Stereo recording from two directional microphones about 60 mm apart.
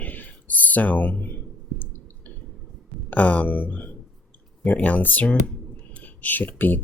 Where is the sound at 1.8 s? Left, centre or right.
Left.